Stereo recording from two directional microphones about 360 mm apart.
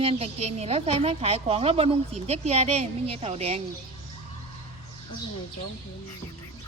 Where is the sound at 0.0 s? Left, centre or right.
Centre.